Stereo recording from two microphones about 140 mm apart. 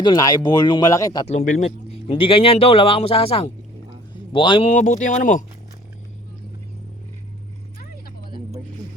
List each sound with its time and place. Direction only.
0.0 s speech: 30° left (ahead or behind)
1.4 s speech: 60° left (ahead or behind)
1.9 s a man's voice: 40° left (ahead or behind)
4.7 s speech: 60° left (ahead or behind)
7.8 s vehicle: 90° left